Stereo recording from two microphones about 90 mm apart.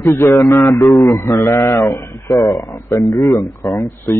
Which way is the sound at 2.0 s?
30° left (ahead or behind).